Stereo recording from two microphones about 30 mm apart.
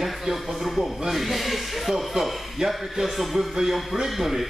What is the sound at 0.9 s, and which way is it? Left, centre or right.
Speech, centre.